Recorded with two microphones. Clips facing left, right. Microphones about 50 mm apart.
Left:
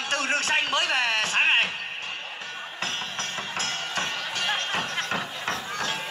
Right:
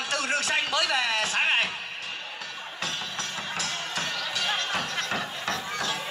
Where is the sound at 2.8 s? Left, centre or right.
Left.